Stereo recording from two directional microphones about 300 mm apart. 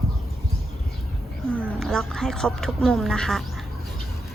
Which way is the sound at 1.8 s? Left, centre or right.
Centre.